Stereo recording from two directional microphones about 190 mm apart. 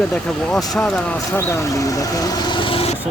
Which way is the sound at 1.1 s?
15° left (ahead or behind).